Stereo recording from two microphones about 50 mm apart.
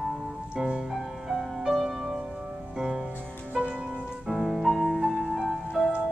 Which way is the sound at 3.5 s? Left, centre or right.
Right.